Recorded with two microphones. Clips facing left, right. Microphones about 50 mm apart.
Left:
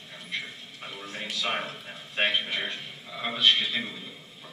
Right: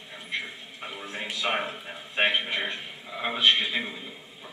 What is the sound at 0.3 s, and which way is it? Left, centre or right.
A man's voice, centre.